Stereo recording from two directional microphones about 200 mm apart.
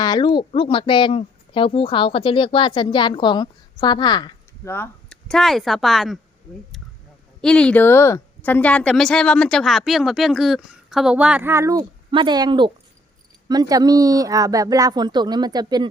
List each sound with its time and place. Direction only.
0.0 s speech: 20° left (ahead or behind); by 6.1 s centre (ahead or behind)
7.4 s a woman's voice: 5° left (ahead or behind); by 15.9 s 20° right (ahead or behind)